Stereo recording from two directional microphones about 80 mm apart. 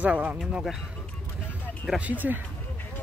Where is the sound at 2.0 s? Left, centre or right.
Right.